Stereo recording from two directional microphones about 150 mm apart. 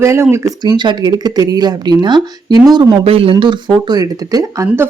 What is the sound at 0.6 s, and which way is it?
Speech, 30° right (ahead or behind).